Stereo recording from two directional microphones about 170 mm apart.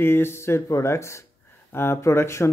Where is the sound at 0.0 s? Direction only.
15° left (ahead or behind).